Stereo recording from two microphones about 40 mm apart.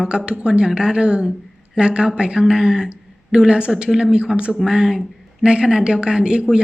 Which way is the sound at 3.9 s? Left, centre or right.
Centre.